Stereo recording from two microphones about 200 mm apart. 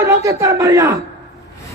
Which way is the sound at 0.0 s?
15° right (ahead or behind).